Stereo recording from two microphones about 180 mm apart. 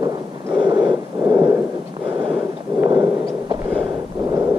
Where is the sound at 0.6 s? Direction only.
25° right (ahead or behind).